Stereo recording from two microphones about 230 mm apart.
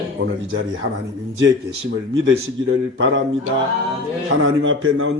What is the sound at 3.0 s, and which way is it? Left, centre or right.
Speech, right.